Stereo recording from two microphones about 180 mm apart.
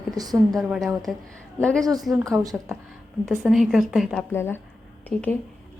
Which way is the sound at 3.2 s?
Centre (ahead or behind).